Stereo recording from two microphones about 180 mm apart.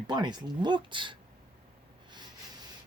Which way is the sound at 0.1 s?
25° right (ahead or behind).